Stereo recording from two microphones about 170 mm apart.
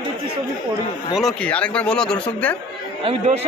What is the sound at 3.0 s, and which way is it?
Speech, 40° right (ahead or behind).